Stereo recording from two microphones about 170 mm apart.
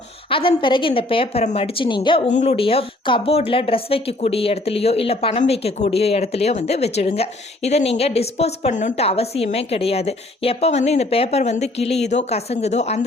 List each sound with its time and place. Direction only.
0.3 s speech: 30° left (ahead or behind)
2.3 s speech: 40° left (ahead or behind)